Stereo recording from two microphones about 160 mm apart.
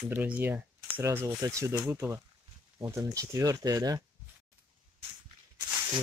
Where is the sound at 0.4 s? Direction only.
10° right (ahead or behind).